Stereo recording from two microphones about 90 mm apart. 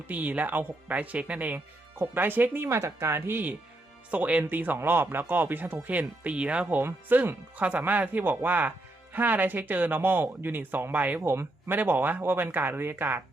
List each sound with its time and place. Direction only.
0.1 s speech: 15° right (ahead or behind)